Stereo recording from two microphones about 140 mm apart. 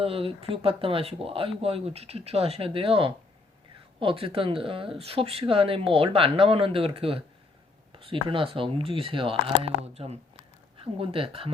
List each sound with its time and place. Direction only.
0.0 s speech: 40° right (ahead or behind)